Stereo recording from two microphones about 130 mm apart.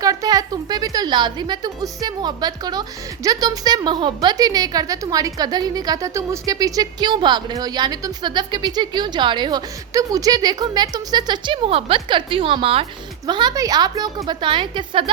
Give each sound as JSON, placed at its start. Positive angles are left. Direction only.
{"t": 0.0, "sound": "a woman's voice", "side_deg": -30}
{"t": 13.2, "sound": "a woman's voice", "side_deg": -35}